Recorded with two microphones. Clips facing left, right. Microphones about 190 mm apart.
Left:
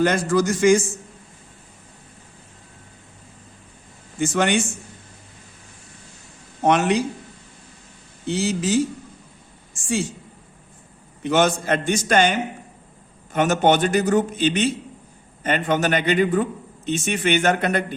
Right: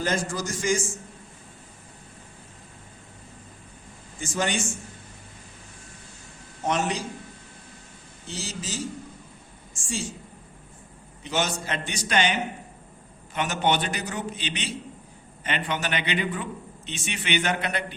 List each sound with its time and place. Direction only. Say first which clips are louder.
0.0 s a man's voice: left 9 dB; 65° left (ahead or behind)
4.2 s a man's voice: left 8 dB; 65° left (ahead or behind)
6.6 s a man's voice: left 8 dB; 65° left (ahead or behind)
8.3 s a man's voice: left 14 dB; 65° left (ahead or behind)
9.8 s a woman's voice: left 8 dB; 60° left (ahead or behind)
11.2 s a man's voice: left 9 dB; 55° left (ahead or behind)